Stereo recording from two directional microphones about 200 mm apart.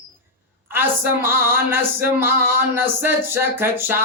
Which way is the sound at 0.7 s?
10° right (ahead or behind).